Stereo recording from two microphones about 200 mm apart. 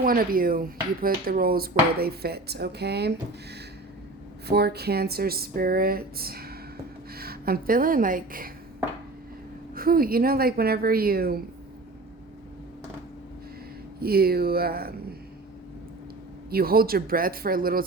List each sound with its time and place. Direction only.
0.0 s speech: 45° right (ahead or behind)
4.4 s speech: 55° right (ahead or behind)
9.7 s speech: 45° right (ahead or behind)
14.0 s speech: 50° right (ahead or behind)
16.5 s speech: 50° right (ahead or behind)